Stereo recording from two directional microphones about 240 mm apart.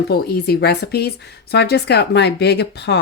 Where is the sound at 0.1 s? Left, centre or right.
Left.